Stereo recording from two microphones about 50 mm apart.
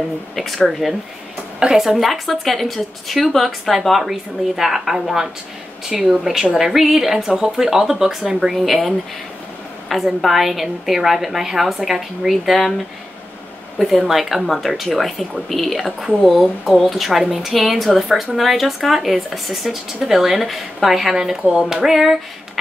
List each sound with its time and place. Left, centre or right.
0.7 s speech: centre
13.7 s speech: centre